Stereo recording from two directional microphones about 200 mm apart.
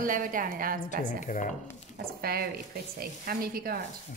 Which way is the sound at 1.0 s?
40° left (ahead or behind).